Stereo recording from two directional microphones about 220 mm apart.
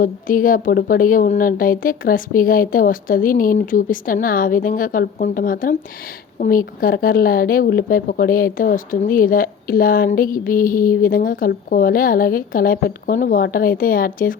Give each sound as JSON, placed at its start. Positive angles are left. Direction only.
{"t": 0.0, "sound": "a woman's voice", "side_deg": 40}